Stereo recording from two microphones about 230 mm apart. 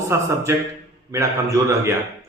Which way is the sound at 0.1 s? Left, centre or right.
Centre.